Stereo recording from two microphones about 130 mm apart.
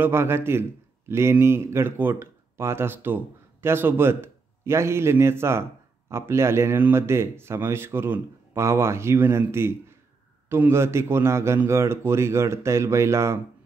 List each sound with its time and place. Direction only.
0.0 s a man's voice: 20° right (ahead or behind)